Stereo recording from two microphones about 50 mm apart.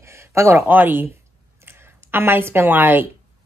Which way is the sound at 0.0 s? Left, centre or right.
Right.